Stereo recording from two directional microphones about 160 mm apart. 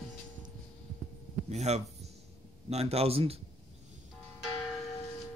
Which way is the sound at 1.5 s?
45° right (ahead or behind).